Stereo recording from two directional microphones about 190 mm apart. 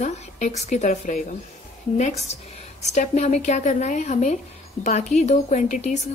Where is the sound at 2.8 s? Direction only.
35° left (ahead or behind).